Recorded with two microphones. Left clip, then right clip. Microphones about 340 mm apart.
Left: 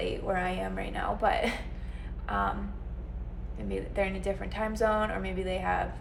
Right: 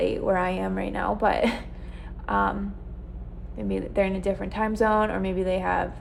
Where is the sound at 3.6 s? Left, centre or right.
Right.